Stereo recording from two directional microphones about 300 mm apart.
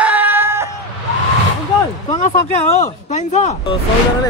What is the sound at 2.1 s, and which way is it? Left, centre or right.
Speech, centre.